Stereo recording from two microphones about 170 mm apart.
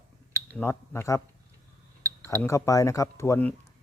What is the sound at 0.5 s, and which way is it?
Speech, 15° left (ahead or behind).